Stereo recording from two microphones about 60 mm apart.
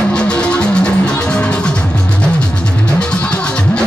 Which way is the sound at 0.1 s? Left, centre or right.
Centre.